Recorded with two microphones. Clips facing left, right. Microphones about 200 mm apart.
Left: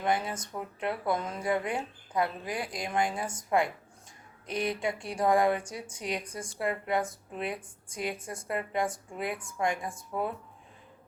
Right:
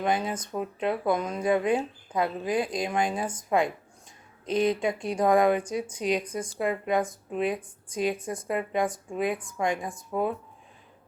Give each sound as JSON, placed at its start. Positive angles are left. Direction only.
{"t": 0.0, "sound": "speech", "side_deg": -20}